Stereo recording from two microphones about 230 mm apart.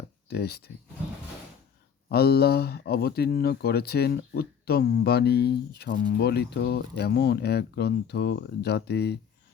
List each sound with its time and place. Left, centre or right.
0.3 s speech: left
2.0 s speech: left